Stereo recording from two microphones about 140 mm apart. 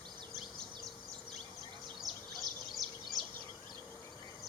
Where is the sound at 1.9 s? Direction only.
Centre (ahead or behind).